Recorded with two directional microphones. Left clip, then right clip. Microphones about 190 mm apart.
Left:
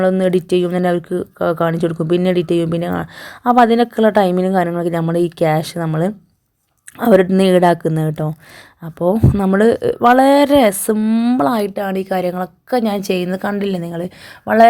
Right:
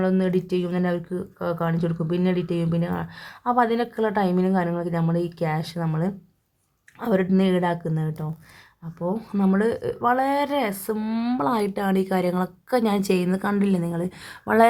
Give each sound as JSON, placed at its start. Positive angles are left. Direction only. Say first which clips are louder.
{"t": 0.0, "sound": "speech", "louder": "left 9 dB", "side_deg": 35}
{"t": 7.0, "sound": "speech", "louder": "left 11 dB", "side_deg": 40}
{"t": 9.1, "sound": "speech", "louder": "left 9 dB", "side_deg": 25}
{"t": 10.9, "sound": "a woman's voice", "louder": "left 10 dB", "side_deg": 20}